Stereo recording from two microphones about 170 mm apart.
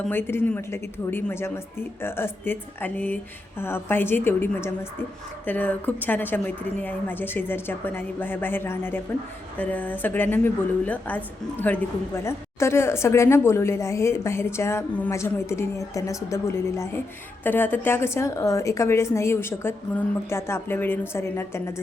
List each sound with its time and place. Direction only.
0.1 s a woman's voice: 15° left (ahead or behind)